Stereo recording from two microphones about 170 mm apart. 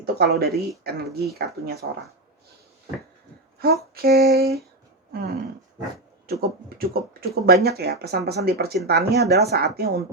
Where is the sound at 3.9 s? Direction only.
65° right (ahead or behind).